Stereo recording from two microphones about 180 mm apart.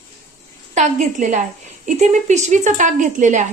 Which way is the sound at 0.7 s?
40° right (ahead or behind).